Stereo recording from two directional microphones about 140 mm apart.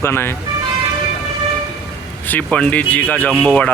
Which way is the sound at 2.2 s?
10° left (ahead or behind).